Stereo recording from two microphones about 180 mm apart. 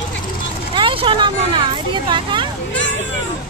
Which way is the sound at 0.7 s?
30° right (ahead or behind).